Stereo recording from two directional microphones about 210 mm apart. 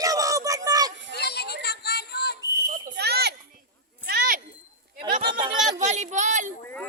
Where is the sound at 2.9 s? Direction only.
50° right (ahead or behind).